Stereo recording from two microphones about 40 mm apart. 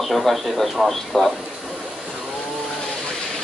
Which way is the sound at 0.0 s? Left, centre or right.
Centre.